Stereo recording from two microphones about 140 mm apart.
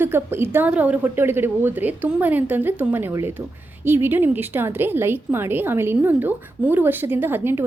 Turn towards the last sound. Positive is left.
turn(degrees=-15)  # may be behind; listen again after turning